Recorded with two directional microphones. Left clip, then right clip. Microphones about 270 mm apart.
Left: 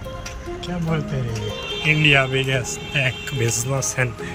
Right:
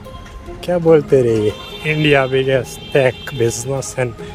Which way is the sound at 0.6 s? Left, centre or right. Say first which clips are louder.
Right 17 dB; centre.